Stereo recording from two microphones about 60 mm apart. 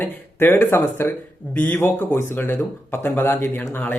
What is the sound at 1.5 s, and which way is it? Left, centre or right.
Speech, left.